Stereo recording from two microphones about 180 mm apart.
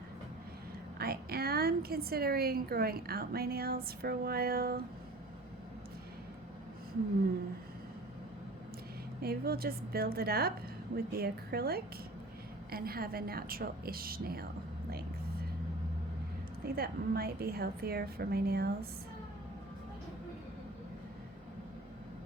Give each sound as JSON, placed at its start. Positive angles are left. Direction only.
{"t": 0.9, "sound": "a woman's voice", "side_deg": -60}
{"t": 9.2, "sound": "a woman's voice", "side_deg": -60}
{"t": 16.6, "sound": "a woman's voice", "side_deg": -60}